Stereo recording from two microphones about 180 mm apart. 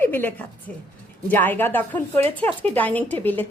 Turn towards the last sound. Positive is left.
turn(degrees=10)  # may be behind; listen again after turning